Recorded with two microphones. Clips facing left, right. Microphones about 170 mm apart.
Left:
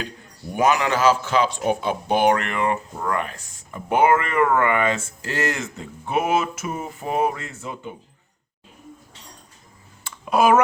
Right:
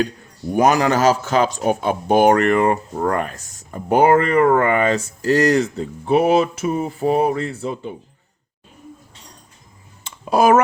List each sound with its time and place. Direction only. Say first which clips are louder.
0.5 s speech: right 4 dB; 40° right (ahead or behind)
10.2 s speech: right 3 dB; 40° right (ahead or behind)